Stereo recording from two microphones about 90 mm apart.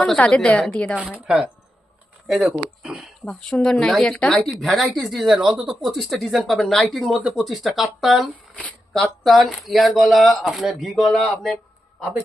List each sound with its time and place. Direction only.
0.0 s a woman's voice: 10° left (ahead or behind)
2.2 s speech: 5° right (ahead or behind)